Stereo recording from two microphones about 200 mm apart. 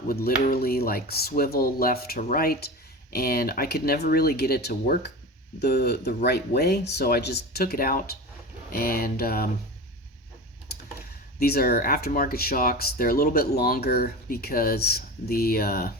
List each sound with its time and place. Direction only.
0.1 s speech: 45° left (ahead or behind)
11.3 s speech: 50° left (ahead or behind)